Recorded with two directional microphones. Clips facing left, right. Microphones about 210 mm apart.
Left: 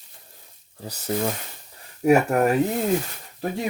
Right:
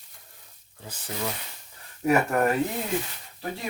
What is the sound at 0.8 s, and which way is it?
Speech, 45° left (ahead or behind).